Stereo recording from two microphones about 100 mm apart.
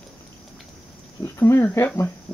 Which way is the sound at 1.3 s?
25° left (ahead or behind).